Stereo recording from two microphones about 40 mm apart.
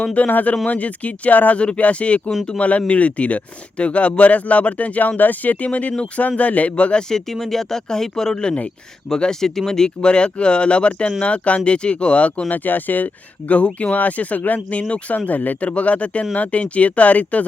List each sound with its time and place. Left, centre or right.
0.0 s speech: left
1.5 s speech: left
7.1 s speech: centre; by 12.5 s left
12.5 s speech: left
15.3 s speech: left
15.7 s speech: left